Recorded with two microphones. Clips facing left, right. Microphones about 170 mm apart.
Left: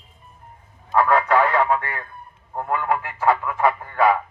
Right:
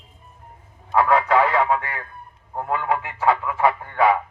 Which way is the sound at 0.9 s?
10° right (ahead or behind).